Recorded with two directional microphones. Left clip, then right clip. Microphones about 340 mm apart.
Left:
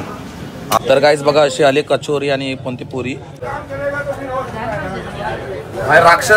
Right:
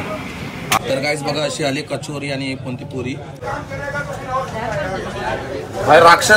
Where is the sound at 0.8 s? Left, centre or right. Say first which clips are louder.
Left 9 dB; left.